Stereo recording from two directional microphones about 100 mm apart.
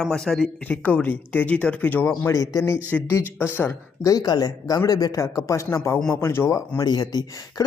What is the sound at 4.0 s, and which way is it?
Speech, 35° left (ahead or behind).